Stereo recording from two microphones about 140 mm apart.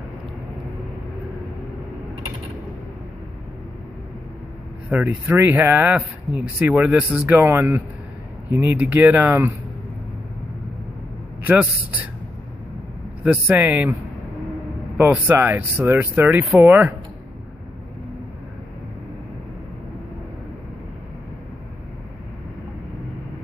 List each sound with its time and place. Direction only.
4.8 s speech: 15° right (ahead or behind)
11.4 s speech: 10° right (ahead or behind)
13.2 s speech: 10° right (ahead or behind)
15.0 s speech: 15° right (ahead or behind)